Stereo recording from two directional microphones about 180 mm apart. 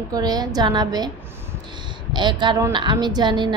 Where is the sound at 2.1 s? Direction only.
25° right (ahead or behind).